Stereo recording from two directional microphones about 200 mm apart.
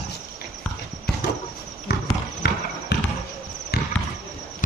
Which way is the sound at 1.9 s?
55° left (ahead or behind).